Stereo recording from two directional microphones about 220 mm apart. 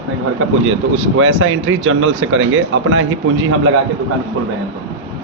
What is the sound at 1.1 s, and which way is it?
Speech, 65° right (ahead or behind).